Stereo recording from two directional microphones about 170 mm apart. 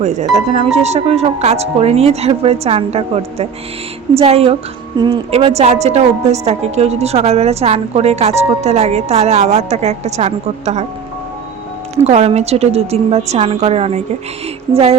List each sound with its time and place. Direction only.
0.0 s a woman's voice: 45° right (ahead or behind)
11.9 s a woman's voice: 40° right (ahead or behind)